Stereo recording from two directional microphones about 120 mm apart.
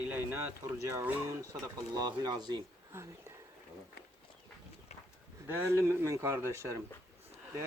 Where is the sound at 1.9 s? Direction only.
35° right (ahead or behind).